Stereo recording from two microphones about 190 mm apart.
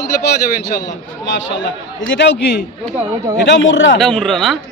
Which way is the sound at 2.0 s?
70° left (ahead or behind).